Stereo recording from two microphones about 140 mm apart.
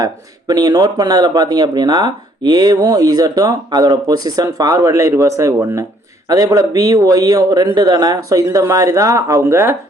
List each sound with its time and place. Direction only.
0.0 s speech: 30° right (ahead or behind)